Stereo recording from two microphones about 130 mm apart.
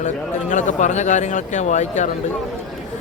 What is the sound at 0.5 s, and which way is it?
Speech, 70° left (ahead or behind).